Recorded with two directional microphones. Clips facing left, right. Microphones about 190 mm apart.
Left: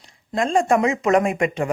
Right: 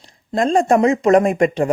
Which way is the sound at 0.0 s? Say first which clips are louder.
Right 4 dB; 35° right (ahead or behind).